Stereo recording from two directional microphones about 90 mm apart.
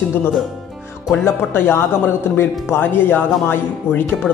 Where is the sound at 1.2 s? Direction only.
30° left (ahead or behind).